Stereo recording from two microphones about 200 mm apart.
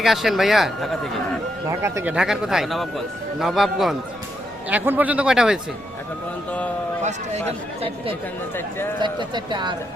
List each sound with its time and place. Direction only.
0.0 s a man's voice: centre (ahead or behind)
1.8 s a man's voice: 10° right (ahead or behind)
7.0 s speech: 35° right (ahead or behind)